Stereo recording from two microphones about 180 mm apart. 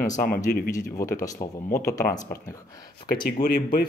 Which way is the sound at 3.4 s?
60° left (ahead or behind).